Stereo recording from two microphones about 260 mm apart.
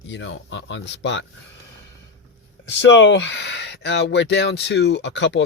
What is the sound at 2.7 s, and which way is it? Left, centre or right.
Speech, left.